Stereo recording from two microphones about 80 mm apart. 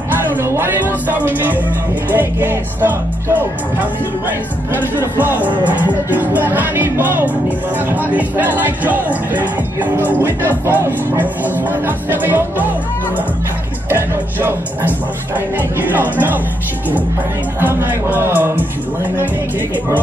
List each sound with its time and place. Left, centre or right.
0.3 s speech: right
13.8 s speech: right
17.6 s speech: right